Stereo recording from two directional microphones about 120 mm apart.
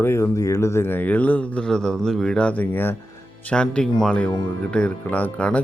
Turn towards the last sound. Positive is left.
turn(degrees=10)  # may be behind; listen again after turning